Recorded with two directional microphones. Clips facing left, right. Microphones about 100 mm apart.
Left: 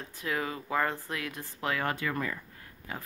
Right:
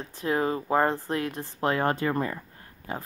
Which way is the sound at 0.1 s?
35° right (ahead or behind).